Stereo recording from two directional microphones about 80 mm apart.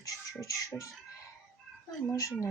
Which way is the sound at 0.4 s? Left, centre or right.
Left.